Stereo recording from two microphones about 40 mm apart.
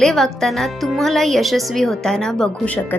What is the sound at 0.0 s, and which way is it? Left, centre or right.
A woman's voice, centre.